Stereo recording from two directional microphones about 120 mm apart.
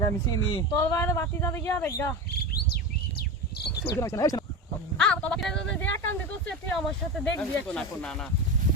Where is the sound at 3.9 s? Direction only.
25° left (ahead or behind).